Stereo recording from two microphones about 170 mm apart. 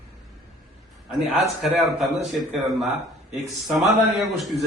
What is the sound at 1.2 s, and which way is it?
A man's voice, centre (ahead or behind).